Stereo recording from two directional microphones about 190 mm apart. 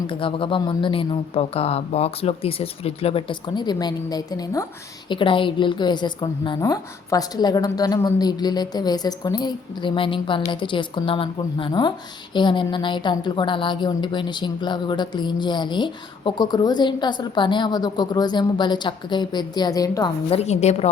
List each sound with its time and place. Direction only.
0.1 s a woman's voice: 25° left (ahead or behind)
20.3 s a woman's voice: 35° left (ahead or behind)